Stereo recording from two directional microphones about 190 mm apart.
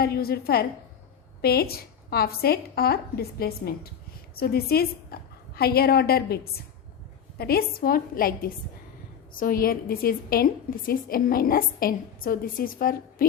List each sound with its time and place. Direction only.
0.0 s a woman's voice: 55° left (ahead or behind)